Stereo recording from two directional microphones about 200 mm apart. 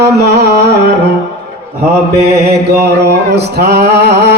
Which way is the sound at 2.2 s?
55° right (ahead or behind).